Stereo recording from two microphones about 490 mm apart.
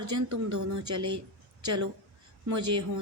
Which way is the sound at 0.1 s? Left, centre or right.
Right.